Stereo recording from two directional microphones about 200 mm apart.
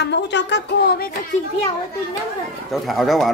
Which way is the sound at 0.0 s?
60° left (ahead or behind).